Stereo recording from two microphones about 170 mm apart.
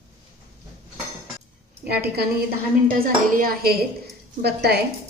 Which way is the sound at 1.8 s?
70° right (ahead or behind).